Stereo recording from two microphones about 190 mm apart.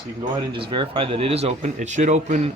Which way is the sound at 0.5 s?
25° right (ahead or behind).